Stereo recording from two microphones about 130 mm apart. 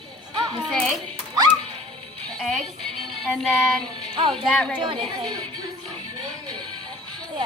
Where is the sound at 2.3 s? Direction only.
5° left (ahead or behind).